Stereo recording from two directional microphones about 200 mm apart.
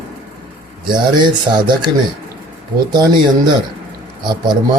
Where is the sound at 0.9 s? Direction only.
20° right (ahead or behind).